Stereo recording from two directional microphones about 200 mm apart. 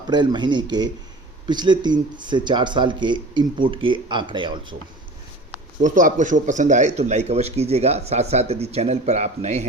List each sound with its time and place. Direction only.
0.1 s speech: 20° right (ahead or behind)
5.8 s speech: 40° right (ahead or behind)